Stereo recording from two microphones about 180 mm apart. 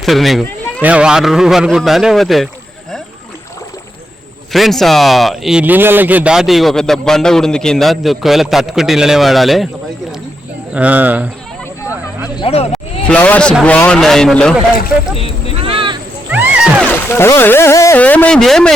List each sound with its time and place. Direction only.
0.0 s speech: centre (ahead or behind)
4.5 s speech: centre (ahead or behind)
10.8 s speech: 10° right (ahead or behind)
12.4 s speech: 35° left (ahead or behind)
12.7 s speech: 5° left (ahead or behind)
15.6 s a sound: 30° right (ahead or behind)
16.3 s music: 10° right (ahead or behind)
16.8 s speech: 10° left (ahead or behind)